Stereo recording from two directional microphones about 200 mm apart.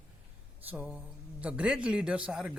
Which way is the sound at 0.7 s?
5° right (ahead or behind).